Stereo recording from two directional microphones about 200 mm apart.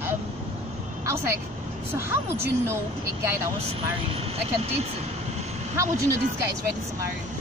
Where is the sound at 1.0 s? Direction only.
15° right (ahead or behind).